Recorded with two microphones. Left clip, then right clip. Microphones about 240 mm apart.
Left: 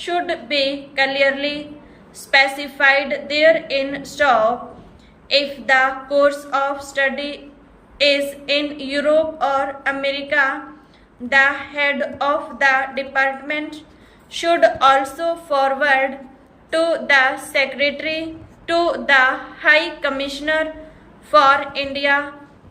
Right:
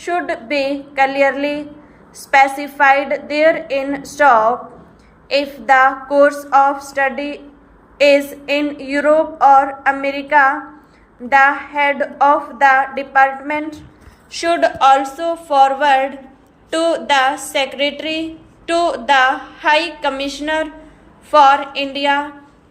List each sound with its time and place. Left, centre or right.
0.0 s a woman's voice: centre
5.3 s a sound: centre
7.9 s a woman's voice: centre